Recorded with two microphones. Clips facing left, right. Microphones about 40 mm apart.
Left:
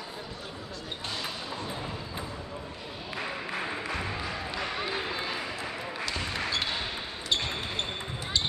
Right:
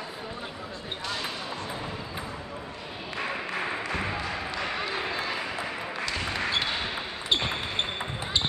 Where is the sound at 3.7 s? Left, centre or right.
Right.